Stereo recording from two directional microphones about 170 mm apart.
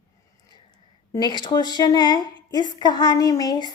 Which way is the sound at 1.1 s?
25° left (ahead or behind).